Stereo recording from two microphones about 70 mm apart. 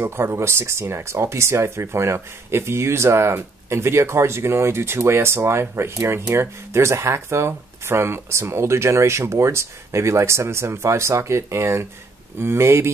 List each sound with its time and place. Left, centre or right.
0.0 s speech: right